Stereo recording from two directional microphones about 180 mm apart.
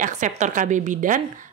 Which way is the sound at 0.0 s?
45° right (ahead or behind).